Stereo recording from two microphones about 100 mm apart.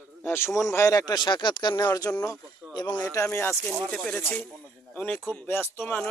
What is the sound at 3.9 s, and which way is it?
Speech, 10° left (ahead or behind).